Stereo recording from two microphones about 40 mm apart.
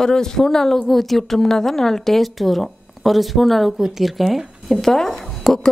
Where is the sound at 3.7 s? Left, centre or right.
Centre.